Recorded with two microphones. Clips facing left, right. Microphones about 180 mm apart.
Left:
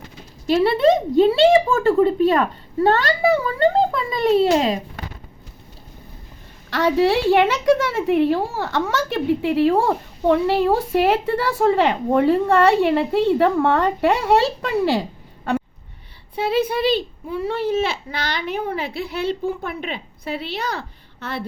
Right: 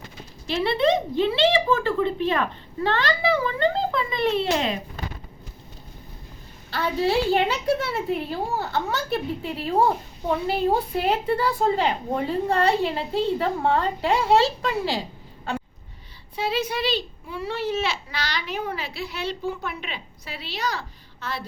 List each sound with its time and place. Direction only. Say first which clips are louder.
0.4 s speech: left 6 dB; 45° left (ahead or behind)
6.7 s a woman's voice: left 6 dB; 80° left; by 15.0 s 60° left (ahead or behind)
16.3 s a child's voice: left 6 dB; 55° left (ahead or behind)